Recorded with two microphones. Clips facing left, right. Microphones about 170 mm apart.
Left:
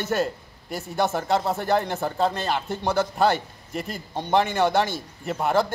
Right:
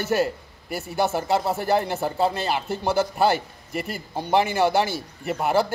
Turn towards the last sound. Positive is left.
turn(degrees=-5)  # may be behind; listen again after turning